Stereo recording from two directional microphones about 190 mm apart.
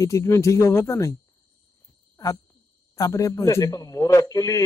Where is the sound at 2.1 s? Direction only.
20° left (ahead or behind).